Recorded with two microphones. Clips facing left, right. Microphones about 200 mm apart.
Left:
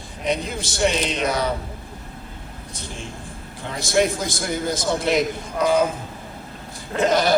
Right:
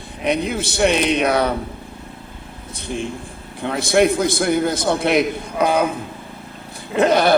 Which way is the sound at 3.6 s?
60° right (ahead or behind).